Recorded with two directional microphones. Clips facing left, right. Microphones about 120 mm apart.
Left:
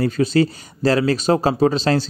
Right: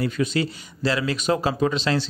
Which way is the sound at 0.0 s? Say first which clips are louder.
Left 6 dB; 40° left (ahead or behind).